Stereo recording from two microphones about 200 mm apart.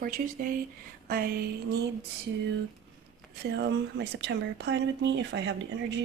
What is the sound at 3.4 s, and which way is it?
A woman's voice, 55° right (ahead or behind).